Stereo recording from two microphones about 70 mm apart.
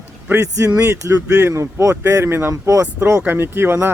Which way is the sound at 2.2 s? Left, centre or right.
Right.